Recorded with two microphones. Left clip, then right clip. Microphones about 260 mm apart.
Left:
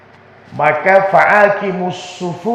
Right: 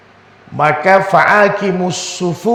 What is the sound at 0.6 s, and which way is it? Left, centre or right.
A man's voice, right.